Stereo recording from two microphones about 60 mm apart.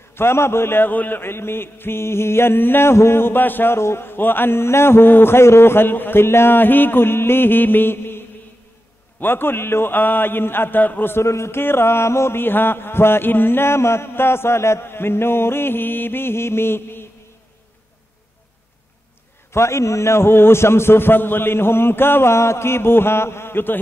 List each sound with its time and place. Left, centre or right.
0.1 s a man's voice: left
9.2 s a man's voice: left
19.5 s a man's voice: left